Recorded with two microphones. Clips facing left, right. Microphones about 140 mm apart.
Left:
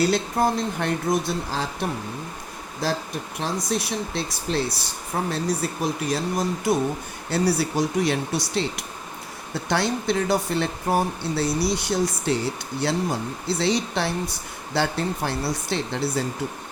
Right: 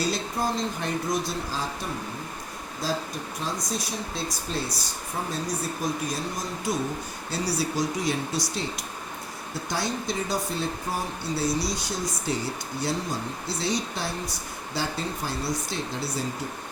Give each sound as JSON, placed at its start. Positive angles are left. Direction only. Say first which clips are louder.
{"t": 0.0, "sound": "speech", "louder": "left 6 dB", "side_deg": 60}